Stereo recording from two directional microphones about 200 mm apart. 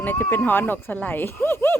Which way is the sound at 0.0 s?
10° left (ahead or behind).